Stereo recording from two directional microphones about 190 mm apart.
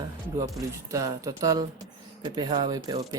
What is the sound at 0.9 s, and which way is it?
Speech, 15° right (ahead or behind).